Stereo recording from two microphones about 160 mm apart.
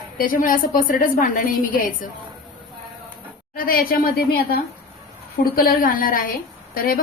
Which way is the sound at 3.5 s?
65° left (ahead or behind).